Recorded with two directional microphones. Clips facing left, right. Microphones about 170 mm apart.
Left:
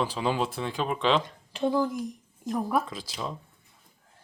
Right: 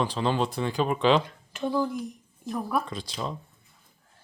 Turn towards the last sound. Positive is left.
turn(degrees=5)  # may be behind; listen again after turning